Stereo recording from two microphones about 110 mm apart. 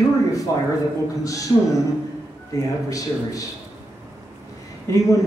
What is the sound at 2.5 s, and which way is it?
Speech, 30° left (ahead or behind).